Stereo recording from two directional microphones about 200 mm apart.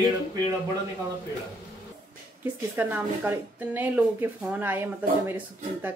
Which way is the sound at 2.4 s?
10° right (ahead or behind).